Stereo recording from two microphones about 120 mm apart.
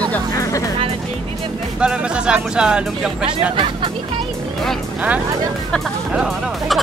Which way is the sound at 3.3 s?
45° right (ahead or behind).